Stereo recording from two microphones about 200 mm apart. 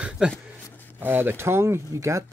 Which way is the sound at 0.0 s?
5° right (ahead or behind).